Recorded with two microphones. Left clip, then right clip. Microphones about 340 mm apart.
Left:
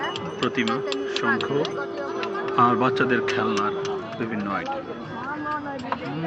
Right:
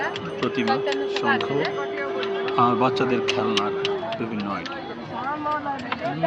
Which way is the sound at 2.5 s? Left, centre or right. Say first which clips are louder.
Left 1 dB; centre.